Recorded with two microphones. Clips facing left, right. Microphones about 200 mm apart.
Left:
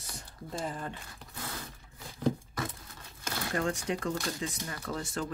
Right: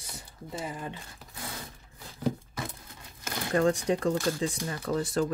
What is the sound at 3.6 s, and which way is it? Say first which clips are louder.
Speech: right 8 dB; 35° right (ahead or behind).